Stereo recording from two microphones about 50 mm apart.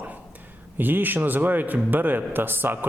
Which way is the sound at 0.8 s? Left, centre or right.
Right.